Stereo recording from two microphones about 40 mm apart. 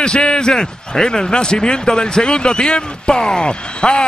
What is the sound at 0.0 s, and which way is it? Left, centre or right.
A man's voice, left.